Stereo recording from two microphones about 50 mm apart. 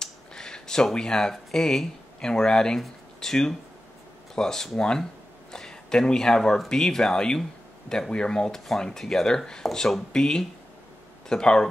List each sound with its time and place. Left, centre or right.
0.0 s speech: centre